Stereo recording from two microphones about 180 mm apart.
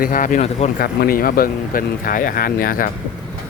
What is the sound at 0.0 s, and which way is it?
Speech, 50° left (ahead or behind).